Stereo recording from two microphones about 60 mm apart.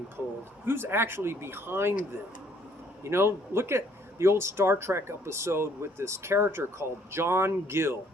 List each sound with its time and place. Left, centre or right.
0.6 s a man's voice: right
3.0 s speech: right